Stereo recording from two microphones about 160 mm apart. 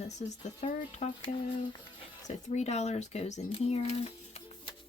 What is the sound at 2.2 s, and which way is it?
A woman's voice, 45° left (ahead or behind).